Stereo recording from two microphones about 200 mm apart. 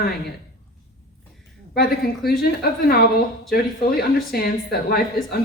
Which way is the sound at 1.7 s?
50° left (ahead or behind).